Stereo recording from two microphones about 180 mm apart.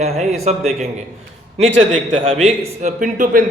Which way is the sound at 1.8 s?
30° right (ahead or behind).